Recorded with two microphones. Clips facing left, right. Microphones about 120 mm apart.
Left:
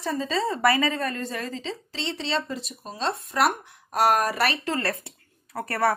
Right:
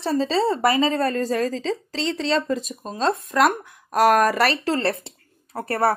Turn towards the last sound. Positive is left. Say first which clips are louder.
# right 3 dB
turn(degrees=-30)  # may be behind; listen again after turning